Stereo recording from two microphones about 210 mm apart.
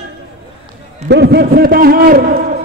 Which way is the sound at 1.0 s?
55° right (ahead or behind).